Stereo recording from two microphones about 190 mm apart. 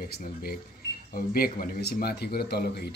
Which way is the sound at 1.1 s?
50° left (ahead or behind).